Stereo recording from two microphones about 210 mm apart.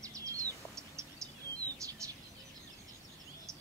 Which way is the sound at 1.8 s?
15° right (ahead or behind).